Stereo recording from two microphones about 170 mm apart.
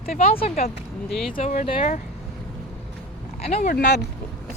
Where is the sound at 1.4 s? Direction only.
45° left (ahead or behind).